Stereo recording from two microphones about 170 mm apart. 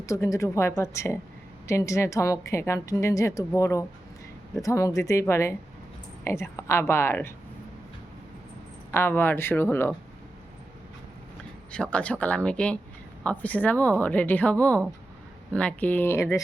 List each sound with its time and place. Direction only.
0.0 s a woman's voice: 20° left (ahead or behind)
8.9 s a woman's voice: 10° left (ahead or behind)
11.7 s a woman's voice: 5° left (ahead or behind)